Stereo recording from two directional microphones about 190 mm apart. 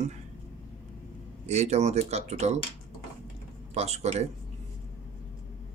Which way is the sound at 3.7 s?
35° right (ahead or behind).